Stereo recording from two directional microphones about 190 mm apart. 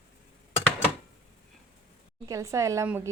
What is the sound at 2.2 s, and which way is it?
Speech, 15° right (ahead or behind).